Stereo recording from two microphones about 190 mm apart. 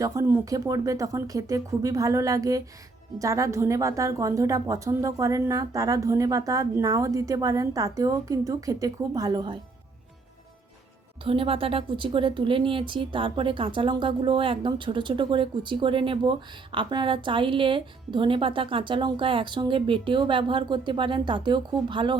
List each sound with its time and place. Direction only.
0.0 s a woman's voice: 15° right (ahead or behind)
11.2 s a woman's voice: 30° right (ahead or behind)